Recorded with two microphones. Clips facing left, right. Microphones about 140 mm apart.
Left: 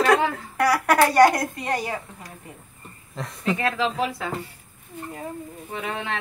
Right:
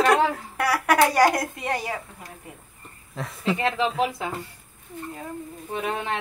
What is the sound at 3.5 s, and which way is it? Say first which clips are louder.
Speech: right 1 dB; 25° right (ahead or behind).